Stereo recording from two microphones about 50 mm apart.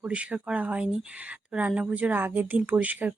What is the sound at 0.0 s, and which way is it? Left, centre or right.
Speech, right.